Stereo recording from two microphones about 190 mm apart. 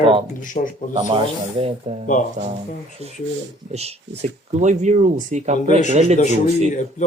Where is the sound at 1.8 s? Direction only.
35° right (ahead or behind).